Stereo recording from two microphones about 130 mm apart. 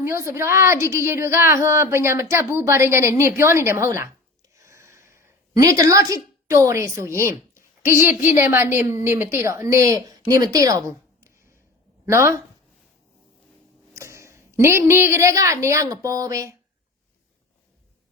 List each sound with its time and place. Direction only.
0.0 s a woman's voice: 20° right (ahead or behind)
13.9 s a woman's voice: 20° right (ahead or behind)